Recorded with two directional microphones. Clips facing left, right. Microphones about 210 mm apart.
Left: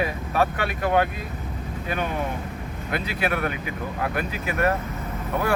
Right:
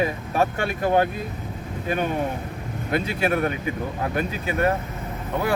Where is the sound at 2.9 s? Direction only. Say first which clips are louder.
Right 3 dB; 25° right (ahead or behind).